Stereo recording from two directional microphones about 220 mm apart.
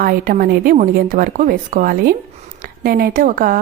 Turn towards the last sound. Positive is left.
turn(degrees=-40)  # may be behind; listen again after turning